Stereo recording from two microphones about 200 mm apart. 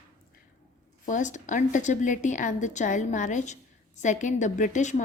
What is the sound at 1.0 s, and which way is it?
A woman's voice, 40° left (ahead or behind).